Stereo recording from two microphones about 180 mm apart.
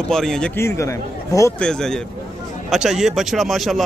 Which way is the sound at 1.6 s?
5° left (ahead or behind).